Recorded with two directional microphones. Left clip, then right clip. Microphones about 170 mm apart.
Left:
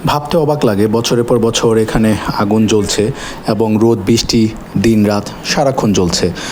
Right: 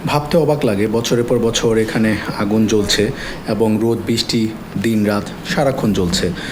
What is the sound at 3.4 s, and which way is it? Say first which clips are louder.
A man's voice: left 4 dB; 45° left (ahead or behind).